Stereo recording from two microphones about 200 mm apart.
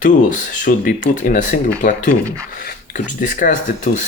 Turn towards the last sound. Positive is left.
turn(degrees=40)  # may be behind; listen again after turning